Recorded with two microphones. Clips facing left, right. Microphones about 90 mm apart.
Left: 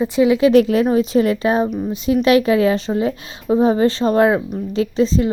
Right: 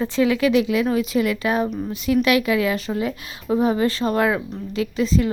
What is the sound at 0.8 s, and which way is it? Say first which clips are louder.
A woman's voice: left 5 dB; 30° left (ahead or behind).